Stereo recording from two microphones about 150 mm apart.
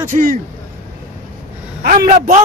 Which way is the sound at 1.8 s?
80° right.